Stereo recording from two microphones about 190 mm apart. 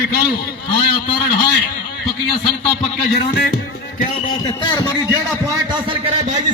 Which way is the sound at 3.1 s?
60° left (ahead or behind).